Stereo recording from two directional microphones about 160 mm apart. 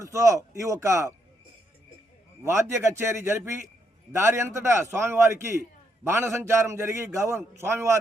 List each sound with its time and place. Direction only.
0.0 s a man's voice: 20° right (ahead or behind)
2.4 s a man's voice: 15° right (ahead or behind)